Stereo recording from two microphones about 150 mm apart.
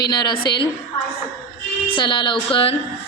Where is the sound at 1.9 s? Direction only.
30° left (ahead or behind).